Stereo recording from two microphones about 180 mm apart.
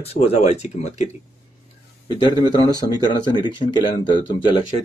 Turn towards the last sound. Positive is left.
turn(degrees=25)  # may be behind; listen again after turning